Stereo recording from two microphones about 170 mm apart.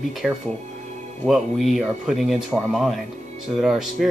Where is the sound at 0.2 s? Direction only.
5° right (ahead or behind).